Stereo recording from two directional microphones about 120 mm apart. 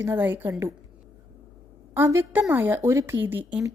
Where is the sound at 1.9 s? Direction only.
20° right (ahead or behind).